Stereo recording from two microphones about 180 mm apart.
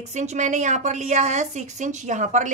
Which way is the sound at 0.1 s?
40° right (ahead or behind).